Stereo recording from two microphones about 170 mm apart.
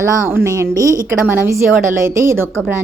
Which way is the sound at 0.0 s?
15° right (ahead or behind).